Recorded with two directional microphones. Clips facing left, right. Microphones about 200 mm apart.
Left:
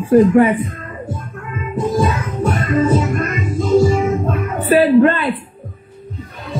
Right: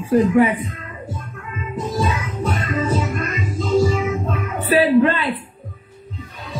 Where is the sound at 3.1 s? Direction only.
50° left (ahead or behind).